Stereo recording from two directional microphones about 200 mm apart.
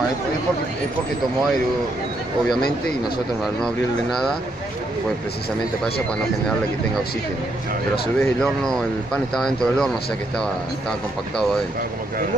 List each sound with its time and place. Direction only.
8.2 s speech: 5° left (ahead or behind)